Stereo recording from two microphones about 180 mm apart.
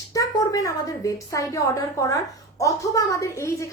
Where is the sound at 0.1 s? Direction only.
20° left (ahead or behind).